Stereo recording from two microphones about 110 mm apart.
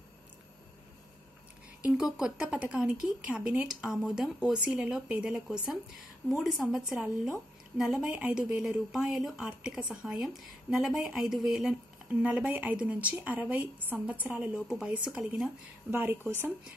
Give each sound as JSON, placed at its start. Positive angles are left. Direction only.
{"t": 1.8, "sound": "a woman's voice", "side_deg": -10}
{"t": 15.9, "sound": "a woman's voice", "side_deg": -20}